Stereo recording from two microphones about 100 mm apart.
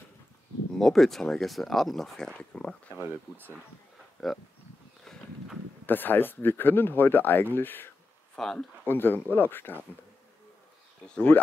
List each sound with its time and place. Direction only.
0.7 s speech: 5° left (ahead or behind)
3.0 s speech: 20° right (ahead or behind)
4.2 s speech: centre (ahead or behind)
5.0 s horse: 5° left (ahead or behind)
5.9 s speech: 20° left (ahead or behind)
8.4 s speech: 5° left (ahead or behind)
8.8 s speech: 20° left (ahead or behind)
11.1 s speech: 15° left (ahead or behind)